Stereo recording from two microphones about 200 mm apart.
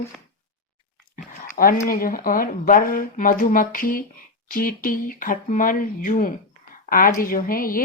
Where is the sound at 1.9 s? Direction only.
45° left (ahead or behind).